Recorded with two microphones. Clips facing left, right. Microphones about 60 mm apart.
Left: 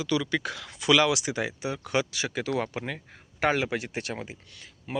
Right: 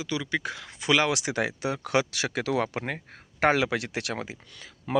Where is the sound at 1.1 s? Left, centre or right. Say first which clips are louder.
Right 1 dB; right.